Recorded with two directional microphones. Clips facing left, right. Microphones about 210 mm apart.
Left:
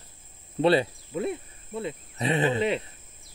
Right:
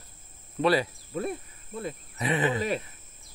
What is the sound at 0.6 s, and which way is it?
Speech, 25° left (ahead or behind).